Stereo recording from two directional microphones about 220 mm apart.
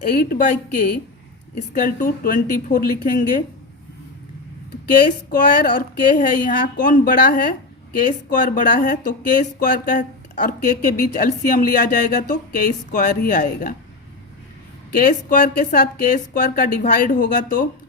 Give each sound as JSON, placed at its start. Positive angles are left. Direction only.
{"t": 0.1, "sound": "speech", "side_deg": 40}
{"t": 1.5, "sound": "speech", "side_deg": 35}
{"t": 4.9, "sound": "speech", "side_deg": 35}
{"t": 14.9, "sound": "speech", "side_deg": 35}